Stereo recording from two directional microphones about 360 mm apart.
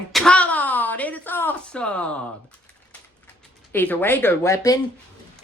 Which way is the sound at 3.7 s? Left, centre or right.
Centre.